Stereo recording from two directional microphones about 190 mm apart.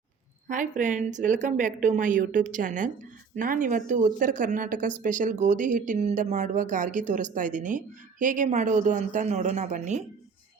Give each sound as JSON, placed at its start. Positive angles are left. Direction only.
{"t": 0.4, "sound": "a woman's voice", "side_deg": -40}